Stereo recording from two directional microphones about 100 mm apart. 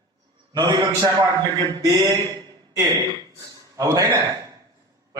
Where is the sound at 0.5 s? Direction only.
45° right (ahead or behind).